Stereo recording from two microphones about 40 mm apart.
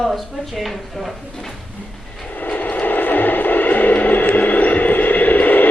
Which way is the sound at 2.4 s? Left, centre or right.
Left.